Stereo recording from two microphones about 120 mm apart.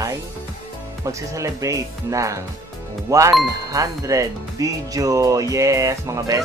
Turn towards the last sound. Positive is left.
turn(degrees=-25)  # may be behind; listen again after turning